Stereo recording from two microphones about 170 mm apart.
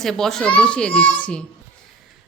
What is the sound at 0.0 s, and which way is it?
A child's voice, centre (ahead or behind).